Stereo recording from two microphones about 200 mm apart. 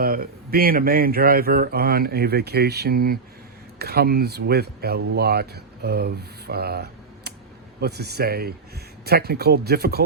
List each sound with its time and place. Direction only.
0.0 s speech: 45° right (ahead or behind)